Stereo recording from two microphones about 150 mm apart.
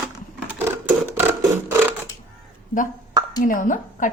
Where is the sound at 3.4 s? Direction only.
60° left (ahead or behind).